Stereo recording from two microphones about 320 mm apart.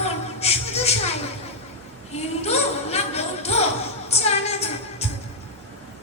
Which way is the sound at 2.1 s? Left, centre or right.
Centre.